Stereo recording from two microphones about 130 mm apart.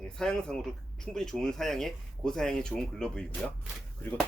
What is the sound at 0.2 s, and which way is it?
Speech, 5° left (ahead or behind).